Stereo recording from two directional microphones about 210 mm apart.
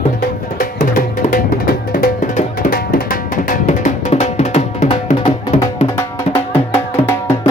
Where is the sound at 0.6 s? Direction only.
40° left (ahead or behind).